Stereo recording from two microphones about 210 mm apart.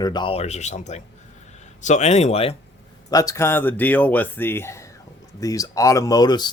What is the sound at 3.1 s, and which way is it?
Speech, 15° left (ahead or behind).